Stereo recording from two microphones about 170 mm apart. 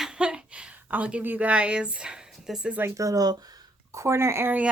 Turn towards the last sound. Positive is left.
turn(degrees=-15)  # may be behind; listen again after turning